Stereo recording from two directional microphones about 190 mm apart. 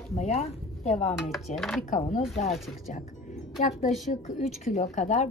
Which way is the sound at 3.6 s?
35° left (ahead or behind).